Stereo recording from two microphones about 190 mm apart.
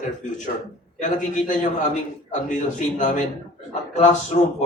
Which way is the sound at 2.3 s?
40° left (ahead or behind).